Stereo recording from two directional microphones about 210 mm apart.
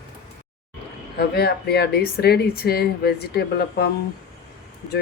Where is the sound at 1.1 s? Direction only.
50° left (ahead or behind).